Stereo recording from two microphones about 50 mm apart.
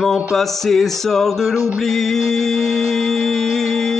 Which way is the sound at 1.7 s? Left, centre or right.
Centre.